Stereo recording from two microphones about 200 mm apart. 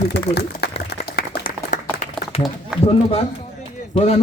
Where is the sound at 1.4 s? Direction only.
45° left (ahead or behind).